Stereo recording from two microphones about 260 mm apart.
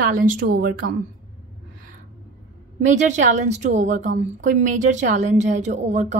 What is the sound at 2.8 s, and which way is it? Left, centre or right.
A woman's voice, right.